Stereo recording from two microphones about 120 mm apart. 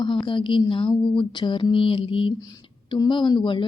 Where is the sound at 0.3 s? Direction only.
45° left (ahead or behind).